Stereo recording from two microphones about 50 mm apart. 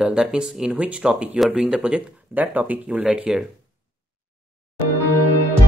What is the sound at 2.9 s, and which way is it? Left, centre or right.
Speech, right.